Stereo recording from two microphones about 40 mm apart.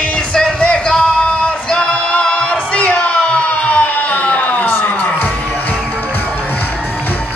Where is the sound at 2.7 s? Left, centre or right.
Left.